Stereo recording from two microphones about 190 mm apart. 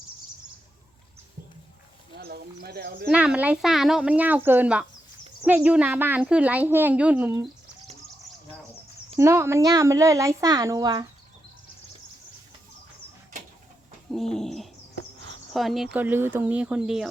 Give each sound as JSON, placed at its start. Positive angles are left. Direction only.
{"t": 2.1, "sound": "speech", "side_deg": -55}
{"t": 3.1, "sound": "speech", "side_deg": -5}
{"t": 9.1, "sound": "speech", "side_deg": -15}
{"t": 14.1, "sound": "bird", "side_deg": 0}
{"t": 15.5, "sound": "speech", "side_deg": 0}